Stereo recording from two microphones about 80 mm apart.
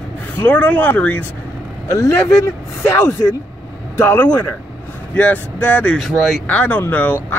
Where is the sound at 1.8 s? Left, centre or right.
Left.